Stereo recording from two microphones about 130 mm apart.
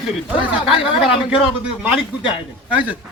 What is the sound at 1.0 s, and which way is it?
Speech, 5° right (ahead or behind).